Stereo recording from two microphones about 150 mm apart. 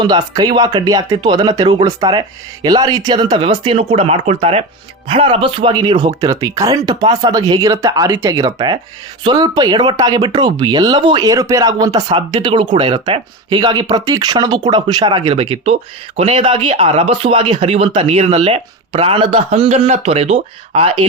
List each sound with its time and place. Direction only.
0.0 s speech: 30° right (ahead or behind)